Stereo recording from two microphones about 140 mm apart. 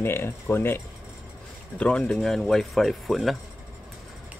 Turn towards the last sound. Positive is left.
turn(degrees=0)  # may be behind; listen again after turning